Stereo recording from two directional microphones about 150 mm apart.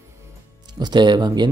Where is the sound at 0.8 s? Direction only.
30° right (ahead or behind).